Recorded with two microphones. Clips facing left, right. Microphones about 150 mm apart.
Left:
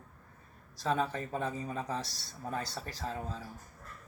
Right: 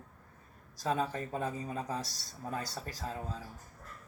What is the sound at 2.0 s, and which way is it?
Speech, 40° right (ahead or behind).